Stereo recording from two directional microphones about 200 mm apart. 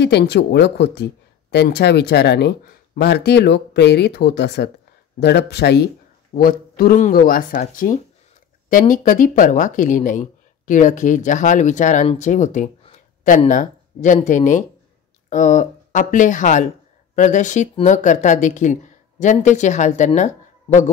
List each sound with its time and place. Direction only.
0.0 s speech: 55° left (ahead or behind); by 20.2 s 35° left (ahead or behind)